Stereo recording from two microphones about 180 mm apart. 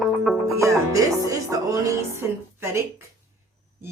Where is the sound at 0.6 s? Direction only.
15° right (ahead or behind).